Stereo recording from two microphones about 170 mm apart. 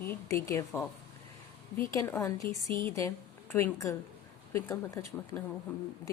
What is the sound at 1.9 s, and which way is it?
A woman's voice, 10° left (ahead or behind).